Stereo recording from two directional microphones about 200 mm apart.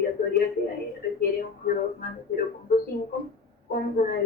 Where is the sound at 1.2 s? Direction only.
45° left (ahead or behind).